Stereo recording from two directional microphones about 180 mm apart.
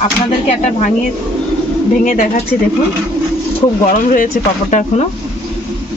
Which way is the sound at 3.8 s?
50° left (ahead or behind).